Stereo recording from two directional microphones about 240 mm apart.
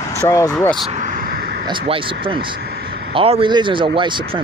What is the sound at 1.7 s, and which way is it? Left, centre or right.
Speech, right.